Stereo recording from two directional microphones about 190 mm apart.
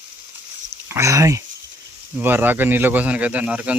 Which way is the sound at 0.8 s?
15° right (ahead or behind).